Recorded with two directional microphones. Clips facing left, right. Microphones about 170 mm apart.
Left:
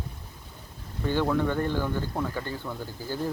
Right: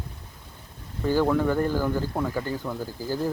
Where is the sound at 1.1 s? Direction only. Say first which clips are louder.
Right 3 dB; 5° right (ahead or behind).